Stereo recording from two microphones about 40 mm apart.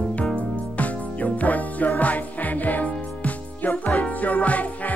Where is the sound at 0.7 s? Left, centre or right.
Left.